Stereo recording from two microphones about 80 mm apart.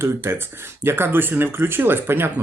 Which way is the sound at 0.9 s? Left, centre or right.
Right.